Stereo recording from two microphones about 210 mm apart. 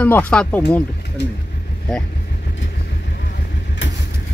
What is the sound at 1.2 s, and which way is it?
Speech, 55° left (ahead or behind).